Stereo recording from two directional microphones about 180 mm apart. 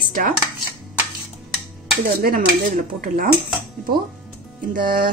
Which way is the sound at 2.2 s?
55° right (ahead or behind).